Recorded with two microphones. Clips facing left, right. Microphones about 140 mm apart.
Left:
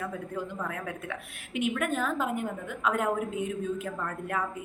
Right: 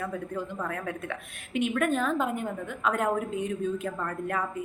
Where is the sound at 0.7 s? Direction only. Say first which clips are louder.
Right 2 dB; 10° left (ahead or behind).